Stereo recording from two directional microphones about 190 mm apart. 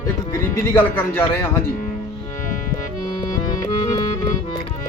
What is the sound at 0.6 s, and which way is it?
Speech, 10° left (ahead or behind).